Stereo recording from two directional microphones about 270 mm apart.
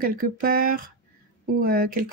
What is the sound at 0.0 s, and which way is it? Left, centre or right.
Speech, right.